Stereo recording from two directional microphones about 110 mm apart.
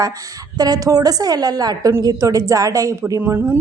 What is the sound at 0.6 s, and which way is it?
A woman's voice, 35° right (ahead or behind).